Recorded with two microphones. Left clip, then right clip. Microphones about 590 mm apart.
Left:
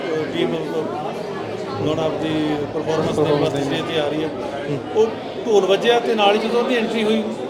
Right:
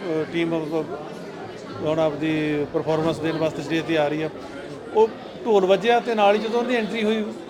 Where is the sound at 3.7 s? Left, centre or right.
Right.